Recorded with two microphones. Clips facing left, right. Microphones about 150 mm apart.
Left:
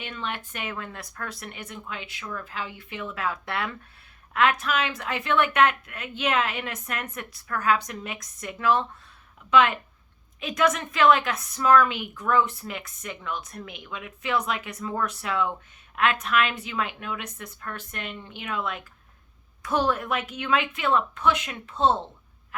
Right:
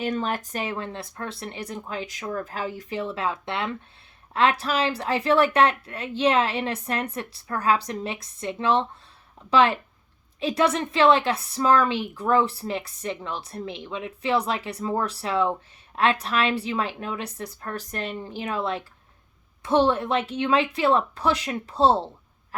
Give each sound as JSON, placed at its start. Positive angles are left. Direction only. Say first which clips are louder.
{"t": 0.0, "sound": "a woman's voice", "louder": "right 8 dB", "side_deg": -40}